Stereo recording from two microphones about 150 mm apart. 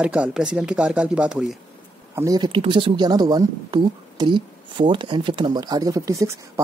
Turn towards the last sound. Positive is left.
turn(degrees=-20)  # may be behind; listen again after turning